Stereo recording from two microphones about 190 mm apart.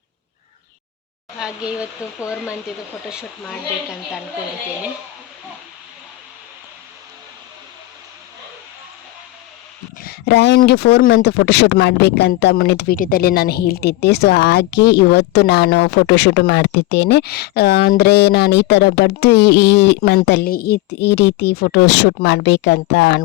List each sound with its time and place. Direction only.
1.4 s speech: 5° right (ahead or behind)
2.0 s speech: 15° left (ahead or behind)
2.5 s speech: 5° right (ahead or behind)
10.0 s speech: 60° left (ahead or behind)